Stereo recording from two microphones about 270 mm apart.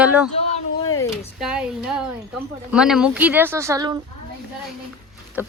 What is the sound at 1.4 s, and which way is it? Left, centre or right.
A woman's voice, centre.